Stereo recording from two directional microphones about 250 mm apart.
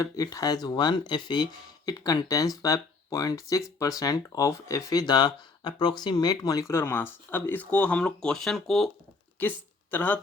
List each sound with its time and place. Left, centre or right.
0.0 s speech: centre
9.9 s speech: centre